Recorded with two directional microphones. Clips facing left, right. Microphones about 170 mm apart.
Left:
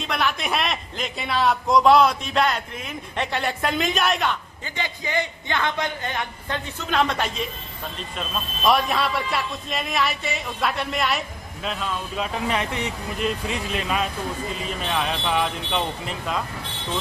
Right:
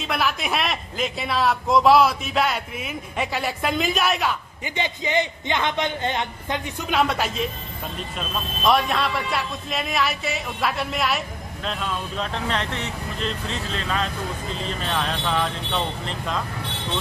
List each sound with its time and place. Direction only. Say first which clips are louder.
0.0 s speech: even; 5° right (ahead or behind)
4.6 s a man's voice: right 4 dB; 20° right (ahead or behind); by 16.4 s 5° left (ahead or behind)